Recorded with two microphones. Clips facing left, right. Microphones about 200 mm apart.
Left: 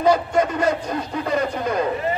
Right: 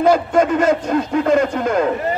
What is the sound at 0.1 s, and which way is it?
A man's voice, 75° right (ahead or behind).